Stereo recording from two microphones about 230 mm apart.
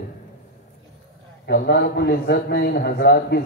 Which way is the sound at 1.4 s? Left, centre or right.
Left.